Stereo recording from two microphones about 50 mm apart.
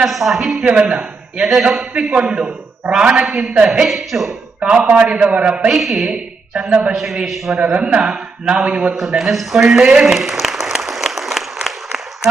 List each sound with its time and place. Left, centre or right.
0.0 s a man's voice: centre
3.8 s speech: centre
4.6 s a man's voice: right
5.8 s a man's voice: centre
6.1 s a man's voice: centre
6.9 s a man's voice: centre
7.7 s a man's voice: right
9.0 s speech: centre
9.6 s applause: centre